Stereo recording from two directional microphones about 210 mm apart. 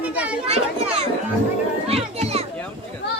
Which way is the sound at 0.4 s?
30° right (ahead or behind).